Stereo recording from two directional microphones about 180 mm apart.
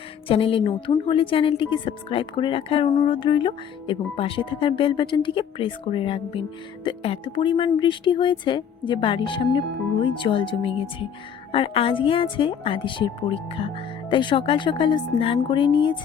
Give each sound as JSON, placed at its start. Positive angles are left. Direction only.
{"t": 0.3, "sound": "a woman's voice", "side_deg": 30}